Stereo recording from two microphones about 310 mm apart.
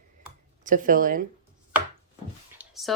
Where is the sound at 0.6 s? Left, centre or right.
Right.